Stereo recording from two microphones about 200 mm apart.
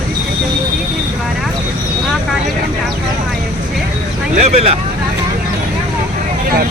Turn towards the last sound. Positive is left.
turn(degrees=-30)  # may be behind; listen again after turning